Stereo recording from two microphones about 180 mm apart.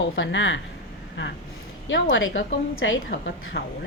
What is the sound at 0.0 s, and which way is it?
A woman's voice, 90° left.